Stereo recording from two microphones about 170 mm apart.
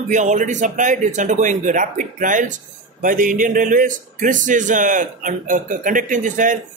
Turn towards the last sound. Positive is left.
turn(degrees=-50)  # may be behind; listen again after turning